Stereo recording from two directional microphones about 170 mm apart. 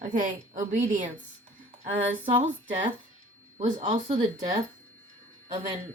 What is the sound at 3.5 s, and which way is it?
Speech, 40° right (ahead or behind).